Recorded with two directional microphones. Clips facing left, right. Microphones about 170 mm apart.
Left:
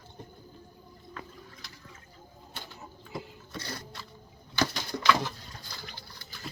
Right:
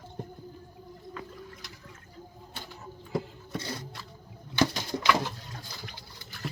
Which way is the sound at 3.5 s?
25° right (ahead or behind).